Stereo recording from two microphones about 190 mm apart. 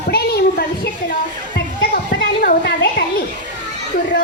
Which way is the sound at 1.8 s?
55° left (ahead or behind).